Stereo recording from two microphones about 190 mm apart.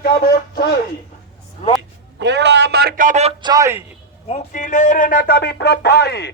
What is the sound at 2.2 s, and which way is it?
A man's voice, 65° right (ahead or behind).